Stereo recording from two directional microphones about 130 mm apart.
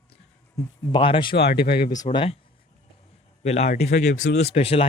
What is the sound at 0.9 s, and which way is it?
Speech, 40° left (ahead or behind).